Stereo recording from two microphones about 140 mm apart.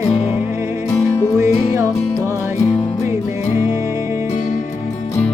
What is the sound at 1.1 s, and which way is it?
Music, 20° left (ahead or behind).